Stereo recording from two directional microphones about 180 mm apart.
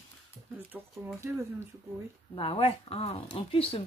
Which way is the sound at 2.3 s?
30° left (ahead or behind).